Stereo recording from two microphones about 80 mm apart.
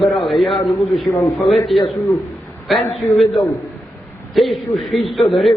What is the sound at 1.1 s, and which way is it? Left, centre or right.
Speech, left.